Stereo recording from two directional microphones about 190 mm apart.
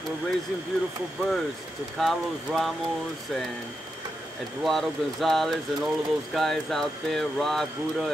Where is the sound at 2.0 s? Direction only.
Centre (ahead or behind).